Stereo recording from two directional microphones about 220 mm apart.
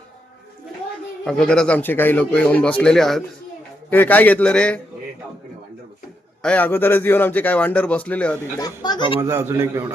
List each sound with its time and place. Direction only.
1.2 s a man's voice: 5° left (ahead or behind)
6.4 s a man's voice: 5° left (ahead or behind)
8.5 s speech: 20° left (ahead or behind)
9.2 s a man's voice: 10° right (ahead or behind)